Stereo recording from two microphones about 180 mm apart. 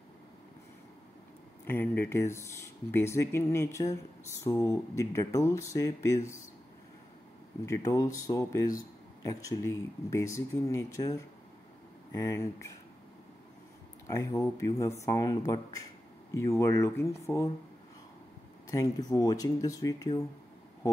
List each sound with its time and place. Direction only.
1.7 s speech: 10° left (ahead or behind)
7.6 s speech: 15° left (ahead or behind)
14.0 s speech: 20° left (ahead or behind)
18.7 s speech: 20° left (ahead or behind)